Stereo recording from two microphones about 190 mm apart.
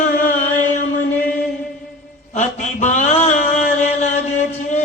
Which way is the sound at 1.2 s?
5° left (ahead or behind).